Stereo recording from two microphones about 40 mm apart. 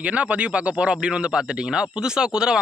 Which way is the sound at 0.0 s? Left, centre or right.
Right.